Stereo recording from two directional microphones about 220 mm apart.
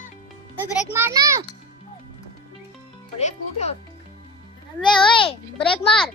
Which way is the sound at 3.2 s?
30° left (ahead or behind).